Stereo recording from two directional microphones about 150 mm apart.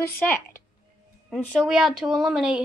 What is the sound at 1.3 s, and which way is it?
Speech, 5° left (ahead or behind).